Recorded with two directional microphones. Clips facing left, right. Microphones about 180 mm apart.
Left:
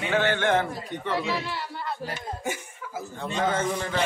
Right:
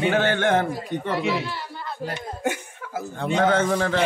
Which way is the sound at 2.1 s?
70° right (ahead or behind).